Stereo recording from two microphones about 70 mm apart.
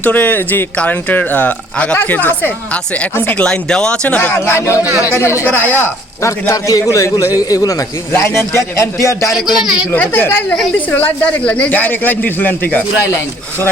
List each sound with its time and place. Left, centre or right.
0.0 s speech: left
4.4 s speech: left
5.5 s speech: left
6.2 s a man's voice: left
7.3 s a man's voice: left
8.1 s a man's voice: left
9.3 s a man's voice: centre
9.9 s speech: left